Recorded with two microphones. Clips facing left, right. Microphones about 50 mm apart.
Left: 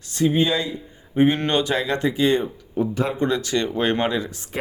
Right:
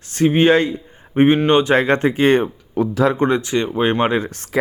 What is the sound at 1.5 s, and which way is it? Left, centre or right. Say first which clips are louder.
Speech: right 7 dB; right.